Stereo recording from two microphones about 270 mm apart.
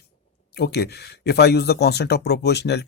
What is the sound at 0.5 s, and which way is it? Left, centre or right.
Speech, left.